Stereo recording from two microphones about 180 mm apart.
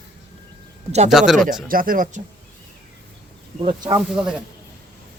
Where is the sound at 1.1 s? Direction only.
Centre (ahead or behind).